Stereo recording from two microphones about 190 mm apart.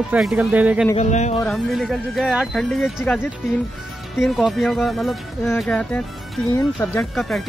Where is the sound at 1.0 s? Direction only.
35° left (ahead or behind).